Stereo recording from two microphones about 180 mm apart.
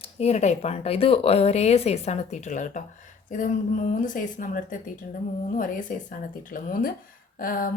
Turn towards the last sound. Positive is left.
turn(degrees=50)  # may be behind; listen again after turning